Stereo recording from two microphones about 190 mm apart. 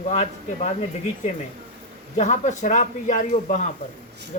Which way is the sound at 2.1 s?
35° left (ahead or behind).